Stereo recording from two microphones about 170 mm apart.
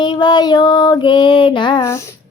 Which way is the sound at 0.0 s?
25° left (ahead or behind).